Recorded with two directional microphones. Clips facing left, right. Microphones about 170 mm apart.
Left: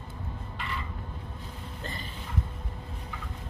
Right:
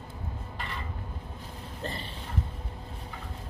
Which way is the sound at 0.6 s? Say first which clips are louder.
Left 2 dB; 40° right (ahead or behind).